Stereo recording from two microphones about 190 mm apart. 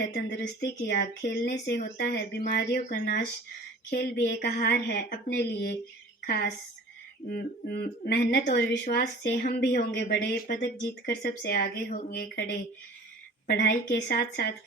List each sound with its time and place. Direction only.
0.0 s a woman's voice: 55° left (ahead or behind)
13.5 s speech: 55° left (ahead or behind)